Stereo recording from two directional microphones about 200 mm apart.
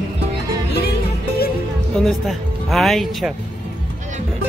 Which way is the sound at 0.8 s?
50° left (ahead or behind).